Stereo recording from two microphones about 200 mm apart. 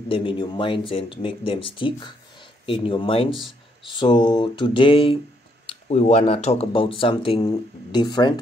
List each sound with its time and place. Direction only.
0.1 s speech: 25° left (ahead or behind)